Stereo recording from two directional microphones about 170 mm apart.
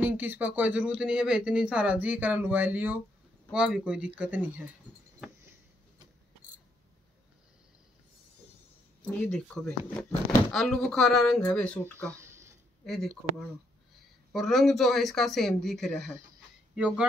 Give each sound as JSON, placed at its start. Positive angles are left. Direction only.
{"t": 0.0, "sound": "speech", "side_deg": -10}
{"t": 9.0, "sound": "speech", "side_deg": 5}
{"t": 12.1, "sound": "a sound", "side_deg": -15}
{"t": 12.8, "sound": "speech", "side_deg": 0}
{"t": 14.3, "sound": "speech", "side_deg": 0}